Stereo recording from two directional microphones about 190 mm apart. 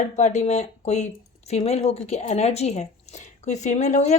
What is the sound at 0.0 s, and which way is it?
Speech, 40° left (ahead or behind).